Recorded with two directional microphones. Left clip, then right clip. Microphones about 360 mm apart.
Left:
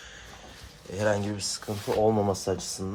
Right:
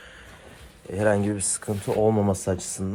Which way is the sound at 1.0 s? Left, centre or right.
Centre.